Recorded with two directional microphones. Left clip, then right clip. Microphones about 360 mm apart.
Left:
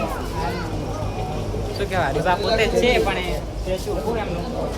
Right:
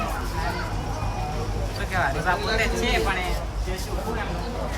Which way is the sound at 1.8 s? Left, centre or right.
Centre.